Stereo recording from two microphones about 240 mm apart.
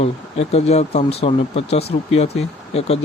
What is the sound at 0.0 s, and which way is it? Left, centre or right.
Speech, left.